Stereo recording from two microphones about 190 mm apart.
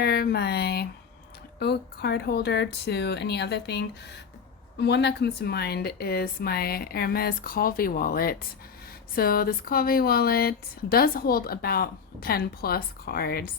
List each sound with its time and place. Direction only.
0.0 s a woman's voice: 55° left (ahead or behind)